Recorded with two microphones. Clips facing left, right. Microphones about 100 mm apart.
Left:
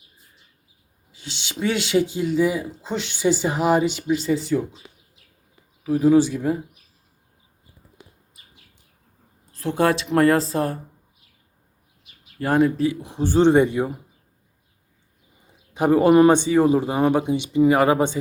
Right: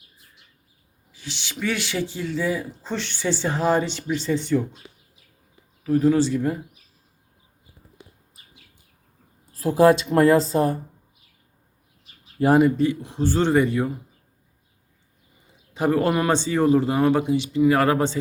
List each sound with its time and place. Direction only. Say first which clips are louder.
1.1 s speech: left 1 dB; 20° left (ahead or behind); by 4.6 s 5° left (ahead or behind)
5.8 s speech: left 2 dB; 10° left (ahead or behind)
9.5 s speech: right 4 dB; 5° right (ahead or behind)
12.4 s speech: right 2 dB; 10° right (ahead or behind)
12.6 s speech: right 1 dB; centre (ahead or behind)
13.0 s speech: left 4 dB; 15° left (ahead or behind)
15.7 s speech: left 6 dB; 15° left (ahead or behind)